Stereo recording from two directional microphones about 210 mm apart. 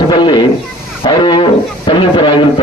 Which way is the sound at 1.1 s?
20° left (ahead or behind).